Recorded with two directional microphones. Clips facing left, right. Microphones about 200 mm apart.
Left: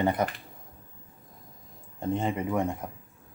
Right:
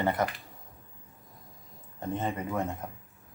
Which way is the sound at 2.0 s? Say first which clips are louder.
Left 4 dB; 15° left (ahead or behind).